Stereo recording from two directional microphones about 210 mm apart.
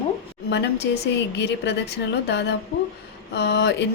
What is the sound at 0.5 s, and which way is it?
A woman's voice, 55° left (ahead or behind).